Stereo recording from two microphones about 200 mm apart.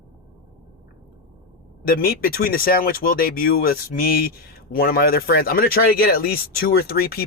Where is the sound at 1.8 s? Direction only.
50° left (ahead or behind).